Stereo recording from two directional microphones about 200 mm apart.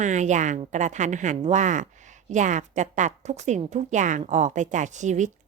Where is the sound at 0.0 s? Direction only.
35° right (ahead or behind).